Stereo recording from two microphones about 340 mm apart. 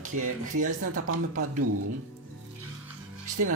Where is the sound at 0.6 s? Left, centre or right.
Right.